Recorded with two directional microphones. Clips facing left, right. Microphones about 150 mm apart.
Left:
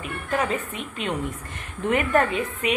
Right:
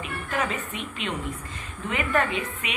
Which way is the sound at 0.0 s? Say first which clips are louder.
Left 3 dB; 45° left (ahead or behind).